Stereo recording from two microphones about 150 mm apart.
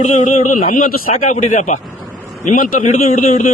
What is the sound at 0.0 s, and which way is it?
A man's voice, 55° left (ahead or behind).